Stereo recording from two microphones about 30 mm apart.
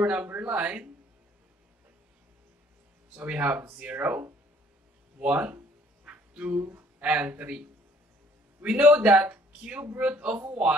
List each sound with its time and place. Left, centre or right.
0.0 s speech: right
0.4 s speech: right
3.3 s speech: right
5.2 s speech: right
8.6 s speech: right